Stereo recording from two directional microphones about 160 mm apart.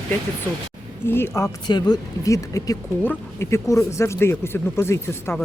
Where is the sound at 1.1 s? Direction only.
15° left (ahead or behind).